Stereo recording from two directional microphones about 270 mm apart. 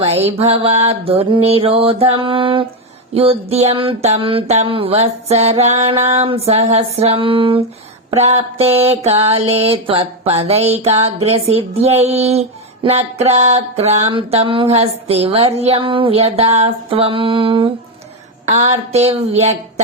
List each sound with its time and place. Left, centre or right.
0.0 s mantra: right